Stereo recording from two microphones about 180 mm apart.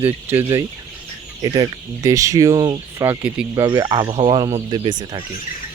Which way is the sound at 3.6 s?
20° right (ahead or behind).